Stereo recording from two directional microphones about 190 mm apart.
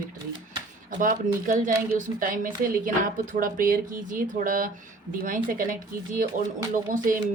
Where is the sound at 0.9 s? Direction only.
45° right (ahead or behind).